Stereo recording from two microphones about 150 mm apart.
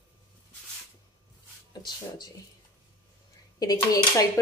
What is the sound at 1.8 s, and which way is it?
Speech, 30° left (ahead or behind).